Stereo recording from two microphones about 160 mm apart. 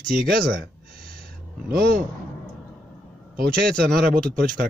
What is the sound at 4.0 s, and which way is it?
Speech, 65° right (ahead or behind).